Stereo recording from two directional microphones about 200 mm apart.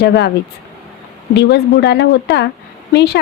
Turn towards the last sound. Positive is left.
turn(degrees=55)  # may be behind; listen again after turning